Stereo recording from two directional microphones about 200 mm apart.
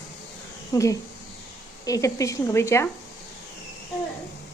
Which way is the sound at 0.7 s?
15° left (ahead or behind).